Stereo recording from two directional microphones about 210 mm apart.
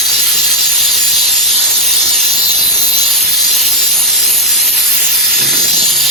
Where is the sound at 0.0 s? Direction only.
Centre (ahead or behind).